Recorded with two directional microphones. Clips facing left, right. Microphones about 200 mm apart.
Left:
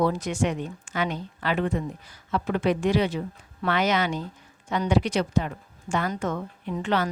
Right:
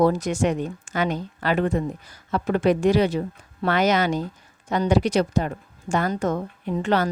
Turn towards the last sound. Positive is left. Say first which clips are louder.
# right 4 dB
turn(degrees=-40)  # may be behind; listen again after turning